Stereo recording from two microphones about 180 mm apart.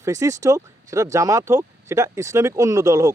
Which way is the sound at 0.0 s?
20° right (ahead or behind).